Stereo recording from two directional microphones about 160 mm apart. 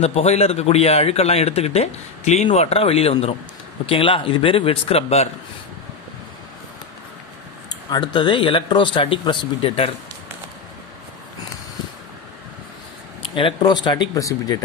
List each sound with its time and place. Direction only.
0.0 s a man's voice: 40° left (ahead or behind)
7.7 s a man's voice: 30° left (ahead or behind)
13.3 s speech: 30° left (ahead or behind)